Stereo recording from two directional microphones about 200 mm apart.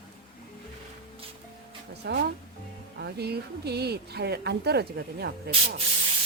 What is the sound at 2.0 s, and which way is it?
Speech, 55° right (ahead or behind).